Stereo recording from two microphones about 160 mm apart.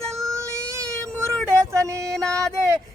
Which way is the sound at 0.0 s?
5° left (ahead or behind).